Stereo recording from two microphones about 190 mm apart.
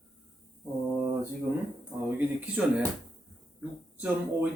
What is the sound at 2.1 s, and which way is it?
Speech, 10° right (ahead or behind).